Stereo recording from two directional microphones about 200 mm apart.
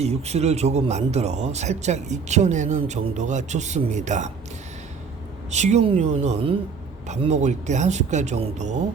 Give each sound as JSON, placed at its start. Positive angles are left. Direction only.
{"t": 0.0, "sound": "speech", "side_deg": -30}
{"t": 5.5, "sound": "speech", "side_deg": -35}